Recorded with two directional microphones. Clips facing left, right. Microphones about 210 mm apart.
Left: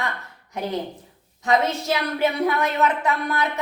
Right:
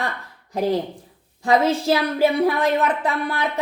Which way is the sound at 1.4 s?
30° right (ahead or behind).